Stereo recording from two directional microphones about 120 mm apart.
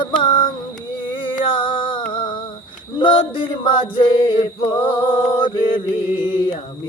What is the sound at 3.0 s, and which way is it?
Male singing, 50° left (ahead or behind).